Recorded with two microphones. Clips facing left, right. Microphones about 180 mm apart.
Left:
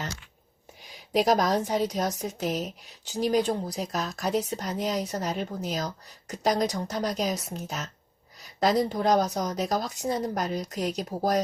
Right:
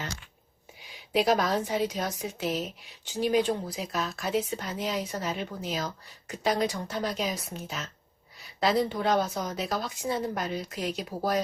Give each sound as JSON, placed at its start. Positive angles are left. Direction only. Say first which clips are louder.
{"t": 0.8, "sound": "a woman's voice", "louder": "left 2 dB", "side_deg": 40}